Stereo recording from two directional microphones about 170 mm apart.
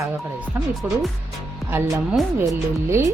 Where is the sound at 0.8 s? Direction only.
10° right (ahead or behind).